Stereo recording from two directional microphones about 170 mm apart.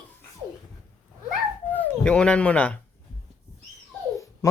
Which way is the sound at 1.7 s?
10° left (ahead or behind).